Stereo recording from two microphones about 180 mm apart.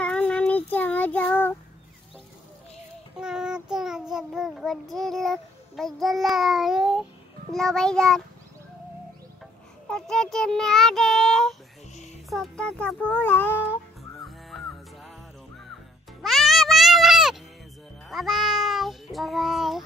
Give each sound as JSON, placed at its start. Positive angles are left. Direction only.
{"t": 0.0, "sound": "child singing", "side_deg": 5}
{"t": 3.2, "sound": "child singing", "side_deg": -5}
{"t": 9.8, "sound": "child singing", "side_deg": 5}
{"t": 11.9, "sound": "music", "side_deg": 40}
{"t": 12.3, "sound": "child singing", "side_deg": 5}
{"t": 15.0, "sound": "music", "side_deg": 0}
{"t": 18.0, "sound": "meow", "side_deg": 0}